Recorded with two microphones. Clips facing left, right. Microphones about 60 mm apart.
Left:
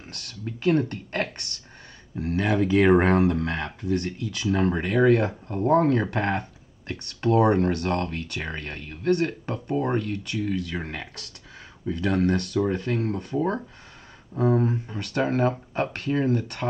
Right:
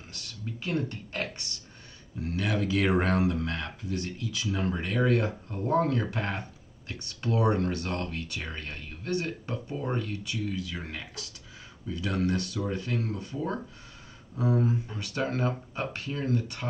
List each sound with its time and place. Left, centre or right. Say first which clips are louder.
0.1 s speech: left 4 dB; left
2.1 s speech: left 6 dB; left
3.8 s speech: left 7 dB; left
4.7 s speech: left 6 dB; left
15.2 s speech: left 6 dB; left